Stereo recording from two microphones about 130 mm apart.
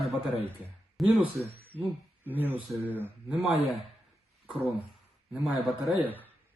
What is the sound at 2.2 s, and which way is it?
Speech, 15° right (ahead or behind).